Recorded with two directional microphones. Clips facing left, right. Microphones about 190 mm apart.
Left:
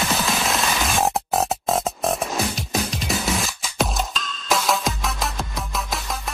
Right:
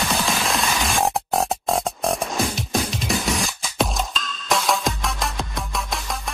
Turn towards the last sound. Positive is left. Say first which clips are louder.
# even
turn(degrees=0)  # may be behind; listen again after turning